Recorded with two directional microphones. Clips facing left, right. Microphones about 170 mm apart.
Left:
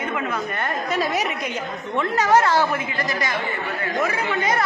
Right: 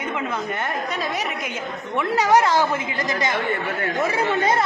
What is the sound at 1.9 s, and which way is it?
A woman's voice, 15° right (ahead or behind).